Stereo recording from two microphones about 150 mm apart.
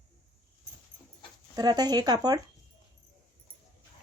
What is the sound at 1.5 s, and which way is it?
Speech, 25° right (ahead or behind).